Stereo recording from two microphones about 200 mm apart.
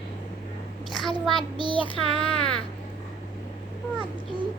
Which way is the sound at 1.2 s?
Centre (ahead or behind).